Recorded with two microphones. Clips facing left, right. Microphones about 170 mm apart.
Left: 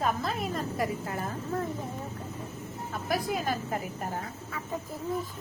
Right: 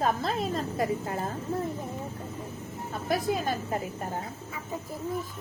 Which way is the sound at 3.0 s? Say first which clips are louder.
Right 2 dB; 25° right (ahead or behind).